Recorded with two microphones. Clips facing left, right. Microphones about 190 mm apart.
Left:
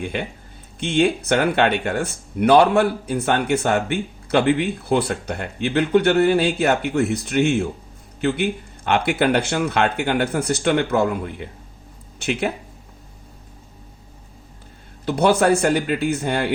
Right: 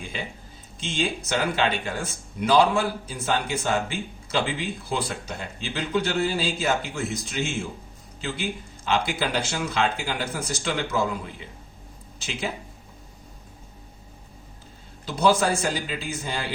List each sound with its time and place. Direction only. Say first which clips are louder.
0.0 s speech: left 8 dB; 60° left (ahead or behind)
15.0 s speech: left 5 dB; 60° left (ahead or behind)